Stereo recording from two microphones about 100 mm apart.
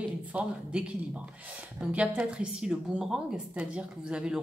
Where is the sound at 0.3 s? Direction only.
15° right (ahead or behind).